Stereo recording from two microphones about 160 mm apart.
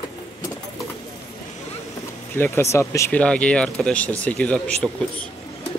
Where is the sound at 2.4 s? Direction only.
15° left (ahead or behind).